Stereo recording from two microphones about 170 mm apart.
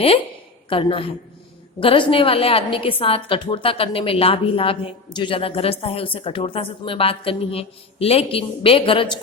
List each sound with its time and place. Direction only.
0.7 s a woman's voice: 30° left (ahead or behind)